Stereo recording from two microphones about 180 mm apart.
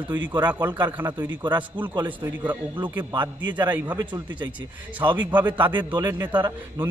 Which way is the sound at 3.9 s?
20° right (ahead or behind).